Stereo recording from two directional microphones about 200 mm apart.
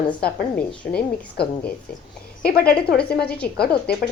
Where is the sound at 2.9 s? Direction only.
5° left (ahead or behind).